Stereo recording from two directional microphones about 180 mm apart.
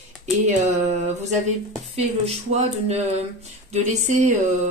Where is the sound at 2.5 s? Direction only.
40° right (ahead or behind).